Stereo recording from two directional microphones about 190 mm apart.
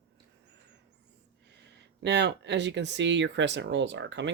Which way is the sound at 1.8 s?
65° right (ahead or behind).